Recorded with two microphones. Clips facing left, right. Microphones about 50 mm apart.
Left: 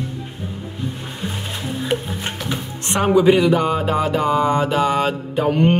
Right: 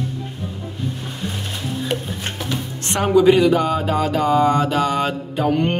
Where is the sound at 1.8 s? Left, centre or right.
Centre.